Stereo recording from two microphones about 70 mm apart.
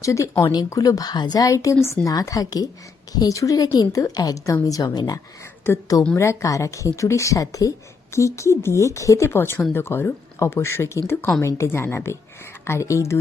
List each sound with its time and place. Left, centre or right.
0.0 s a woman's voice: left
0.7 s speech: left
1.5 s a woman's voice: left
2.0 s speech: left
4.9 s a woman's voice: left
6.1 s a woman's voice: left
8.1 s a woman's voice: left